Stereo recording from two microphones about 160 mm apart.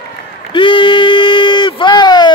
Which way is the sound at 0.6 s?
30° left (ahead or behind).